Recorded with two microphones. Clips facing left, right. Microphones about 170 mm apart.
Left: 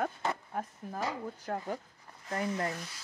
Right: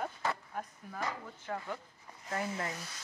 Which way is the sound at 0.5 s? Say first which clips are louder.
Left 4 dB; 40° left (ahead or behind).